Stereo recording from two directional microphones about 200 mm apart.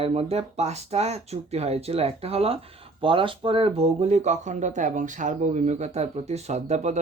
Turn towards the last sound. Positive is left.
turn(degrees=-35)  # may be behind; listen again after turning